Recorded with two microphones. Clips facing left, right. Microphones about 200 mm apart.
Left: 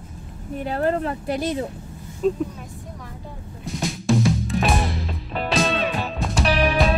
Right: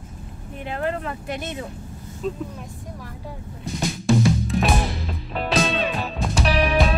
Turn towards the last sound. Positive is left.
turn(degrees=0)  # may be behind; listen again after turning